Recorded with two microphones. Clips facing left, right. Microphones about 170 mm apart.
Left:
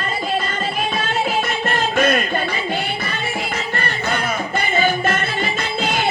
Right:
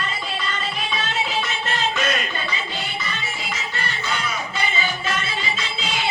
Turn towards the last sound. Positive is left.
turn(degrees=55)  # may be behind; listen again after turning